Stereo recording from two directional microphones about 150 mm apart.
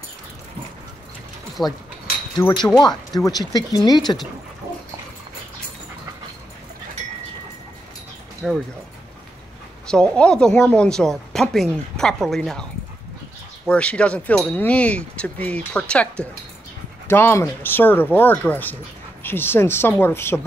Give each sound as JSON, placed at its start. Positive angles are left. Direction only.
{"t": 1.6, "sound": "speech", "side_deg": 0}
{"t": 2.4, "sound": "speech", "side_deg": 15}
{"t": 2.8, "sound": "speech", "side_deg": 25}
{"t": 8.4, "sound": "speech", "side_deg": 0}
{"t": 9.8, "sound": "speech", "side_deg": 5}
{"t": 13.7, "sound": "speech", "side_deg": 10}